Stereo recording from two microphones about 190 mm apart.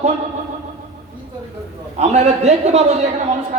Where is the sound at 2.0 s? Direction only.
35° right (ahead or behind).